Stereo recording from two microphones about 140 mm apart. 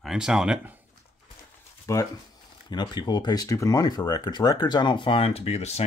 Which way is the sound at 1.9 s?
20° left (ahead or behind).